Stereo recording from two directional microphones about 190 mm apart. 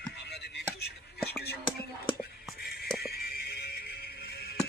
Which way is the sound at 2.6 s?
55° left (ahead or behind).